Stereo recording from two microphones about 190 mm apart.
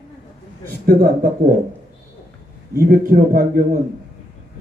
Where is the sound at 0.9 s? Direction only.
55° right (ahead or behind).